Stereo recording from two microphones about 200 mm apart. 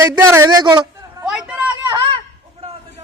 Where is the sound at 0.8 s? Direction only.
5° right (ahead or behind).